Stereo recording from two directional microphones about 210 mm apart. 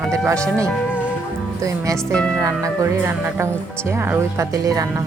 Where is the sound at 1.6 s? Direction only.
15° right (ahead or behind).